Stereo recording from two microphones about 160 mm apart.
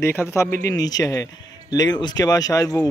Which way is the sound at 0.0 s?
15° left (ahead or behind).